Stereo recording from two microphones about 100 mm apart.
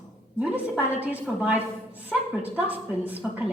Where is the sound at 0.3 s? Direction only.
15° right (ahead or behind).